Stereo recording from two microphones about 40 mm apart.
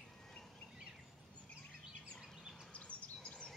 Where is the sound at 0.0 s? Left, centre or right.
Centre.